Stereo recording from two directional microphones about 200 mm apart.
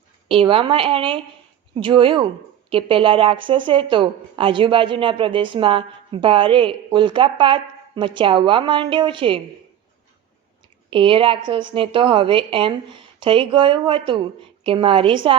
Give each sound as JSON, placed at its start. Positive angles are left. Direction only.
{"t": 0.3, "sound": "speech", "side_deg": -25}
{"t": 10.8, "sound": "speech", "side_deg": -25}